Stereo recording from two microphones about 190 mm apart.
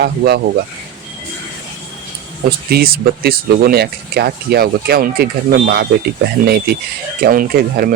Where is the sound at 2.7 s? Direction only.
55° right (ahead or behind).